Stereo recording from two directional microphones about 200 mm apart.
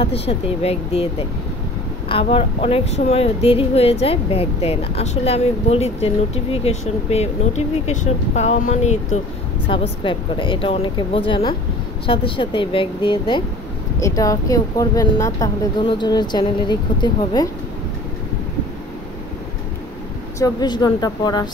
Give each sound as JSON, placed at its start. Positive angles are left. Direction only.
{"t": 0.0, "sound": "a woman's voice", "side_deg": 30}
{"t": 2.0, "sound": "speech", "side_deg": 30}
{"t": 9.7, "sound": "a woman's voice", "side_deg": 25}
{"t": 20.3, "sound": "a woman's voice", "side_deg": 20}